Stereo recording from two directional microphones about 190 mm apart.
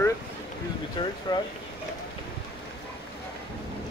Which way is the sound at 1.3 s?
25° left (ahead or behind).